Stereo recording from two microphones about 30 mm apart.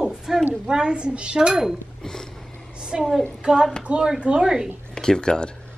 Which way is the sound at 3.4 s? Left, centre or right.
Right.